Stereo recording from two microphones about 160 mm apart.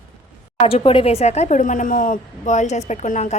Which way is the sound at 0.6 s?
35° left (ahead or behind).